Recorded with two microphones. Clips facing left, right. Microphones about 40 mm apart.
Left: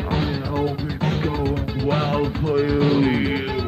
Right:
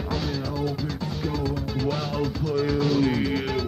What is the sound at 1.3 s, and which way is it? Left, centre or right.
Music, left.